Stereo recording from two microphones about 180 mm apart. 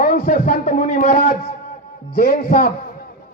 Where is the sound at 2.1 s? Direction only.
60° left (ahead or behind).